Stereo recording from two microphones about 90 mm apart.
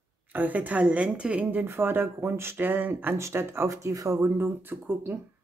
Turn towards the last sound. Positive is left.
turn(degrees=-25)  # may be behind; listen again after turning